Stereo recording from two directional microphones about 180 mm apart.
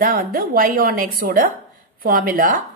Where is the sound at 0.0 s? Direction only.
55° right (ahead or behind).